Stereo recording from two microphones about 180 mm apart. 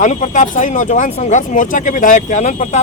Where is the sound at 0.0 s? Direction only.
40° left (ahead or behind).